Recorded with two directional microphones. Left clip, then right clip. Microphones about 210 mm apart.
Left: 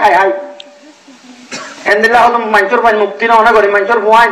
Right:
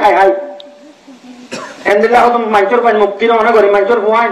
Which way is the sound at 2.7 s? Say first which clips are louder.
Even; 45° right (ahead or behind).